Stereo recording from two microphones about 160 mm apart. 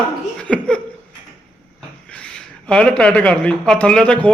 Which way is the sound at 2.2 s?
5° left (ahead or behind).